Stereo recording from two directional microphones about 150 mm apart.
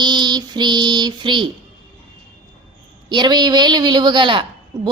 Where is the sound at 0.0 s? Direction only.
30° right (ahead or behind).